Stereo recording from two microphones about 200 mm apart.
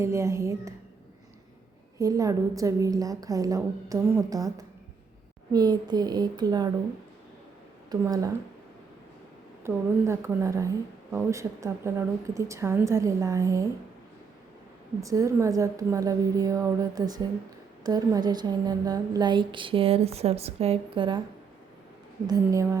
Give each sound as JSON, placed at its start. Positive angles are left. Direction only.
{"t": 0.0, "sound": "a woman's voice", "side_deg": -15}
{"t": 2.0, "sound": "a woman's voice", "side_deg": -15}
{"t": 7.9, "sound": "speech", "side_deg": -15}
{"t": 9.6, "sound": "a woman's voice", "side_deg": -15}
{"t": 15.0, "sound": "a woman's voice", "side_deg": -15}
{"t": 22.3, "sound": "a woman's voice", "side_deg": -15}